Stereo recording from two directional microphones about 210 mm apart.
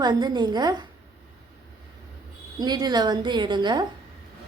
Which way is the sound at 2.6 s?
20° right (ahead or behind).